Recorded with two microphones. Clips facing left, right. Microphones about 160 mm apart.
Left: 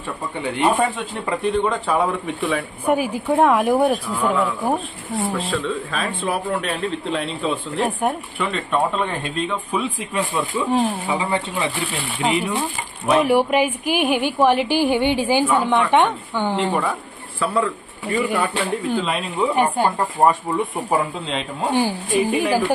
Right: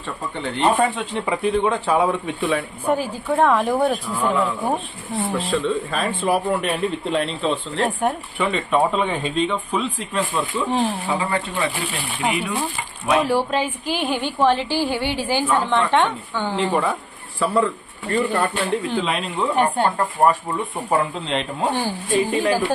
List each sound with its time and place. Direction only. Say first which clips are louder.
0.3 s speech: even; 10° left (ahead or behind)
0.9 s speech: right 1 dB; centre (ahead or behind)
2.8 s speech: left 5 dB; 15° left (ahead or behind)
16.6 s speech: right 1 dB; centre (ahead or behind)
20.2 s speech: left 1 dB; 25° left (ahead or behind)
20.9 s speech: right 2 dB; 5° left (ahead or behind)
21.7 s speech: left 5 dB; 15° left (ahead or behind)